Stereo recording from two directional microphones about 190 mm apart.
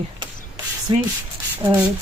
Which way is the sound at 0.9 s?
25° right (ahead or behind).